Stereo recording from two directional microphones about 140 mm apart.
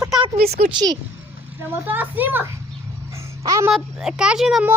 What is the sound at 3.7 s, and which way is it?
A child's voice, centre (ahead or behind).